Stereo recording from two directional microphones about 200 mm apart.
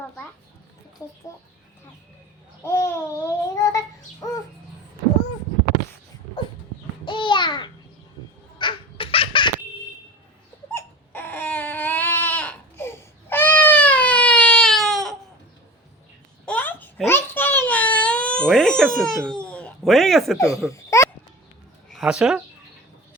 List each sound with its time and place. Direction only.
1.3 s speech: 15° left (ahead or behind)
2.6 s babbling: 15° left (ahead or behind)
7.0 s babbling: 25° left (ahead or behind)
8.5 s baby laughter: 25° left (ahead or behind)
10.8 s crying: 10° left (ahead or behind)
16.5 s a sound: 10° left (ahead or behind)
17.7 s baby cry: 5° left (ahead or behind)
20.7 s a sound: 15° left (ahead or behind)
21.9 s a woman's voice: 5° right (ahead or behind)